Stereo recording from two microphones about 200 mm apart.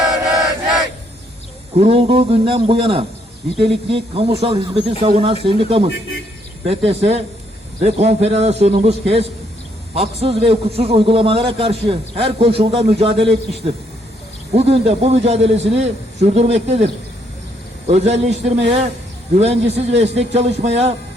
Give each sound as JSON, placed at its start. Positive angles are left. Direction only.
{"t": 1.7, "sound": "a man's voice", "side_deg": -30}
{"t": 17.8, "sound": "a man's voice", "side_deg": -35}